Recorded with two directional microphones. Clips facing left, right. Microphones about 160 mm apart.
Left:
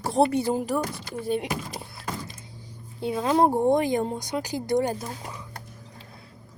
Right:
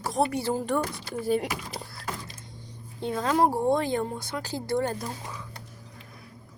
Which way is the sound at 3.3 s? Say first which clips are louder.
Left 3 dB; 25° left (ahead or behind).